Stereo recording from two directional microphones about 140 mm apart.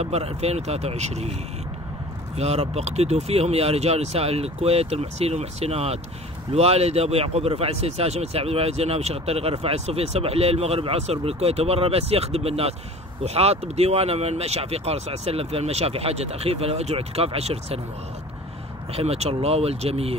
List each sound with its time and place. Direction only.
0.0 s speech: 45° right (ahead or behind)
2.3 s speech: 50° right (ahead or behind)
18.9 s speech: 45° right (ahead or behind)